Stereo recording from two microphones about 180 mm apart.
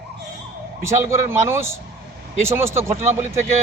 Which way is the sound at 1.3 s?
15° right (ahead or behind).